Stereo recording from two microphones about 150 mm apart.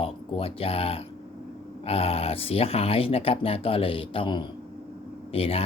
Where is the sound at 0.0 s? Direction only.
40° left (ahead or behind).